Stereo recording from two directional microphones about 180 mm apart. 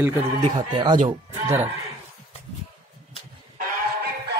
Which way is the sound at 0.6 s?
25° right (ahead or behind).